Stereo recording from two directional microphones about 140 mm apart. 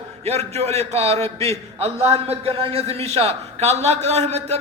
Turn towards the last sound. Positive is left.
turn(degrees=-50)  # may be behind; listen again after turning